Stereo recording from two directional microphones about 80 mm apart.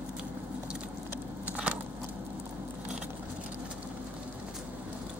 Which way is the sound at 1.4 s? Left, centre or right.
Centre.